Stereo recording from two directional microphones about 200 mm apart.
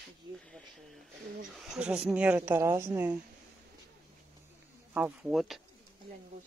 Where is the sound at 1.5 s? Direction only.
Centre (ahead or behind).